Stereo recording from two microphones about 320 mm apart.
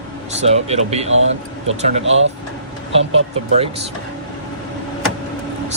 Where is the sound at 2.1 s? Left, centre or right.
Right.